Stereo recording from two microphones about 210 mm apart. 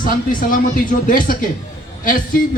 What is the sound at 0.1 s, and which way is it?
Speech, 40° left (ahead or behind).